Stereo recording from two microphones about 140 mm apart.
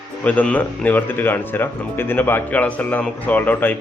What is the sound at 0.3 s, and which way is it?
Speech, 10° left (ahead or behind).